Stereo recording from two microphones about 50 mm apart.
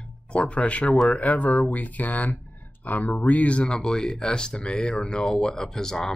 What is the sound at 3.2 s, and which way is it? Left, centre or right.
Speech, left.